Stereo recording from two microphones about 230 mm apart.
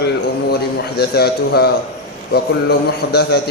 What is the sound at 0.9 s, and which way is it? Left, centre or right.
A man's voice, left.